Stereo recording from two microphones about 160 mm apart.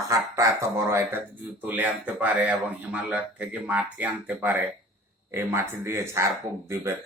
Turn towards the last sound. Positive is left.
turn(degrees=-15)  # may be behind; listen again after turning